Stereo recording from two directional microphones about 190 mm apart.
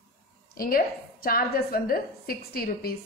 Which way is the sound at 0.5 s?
50° left (ahead or behind).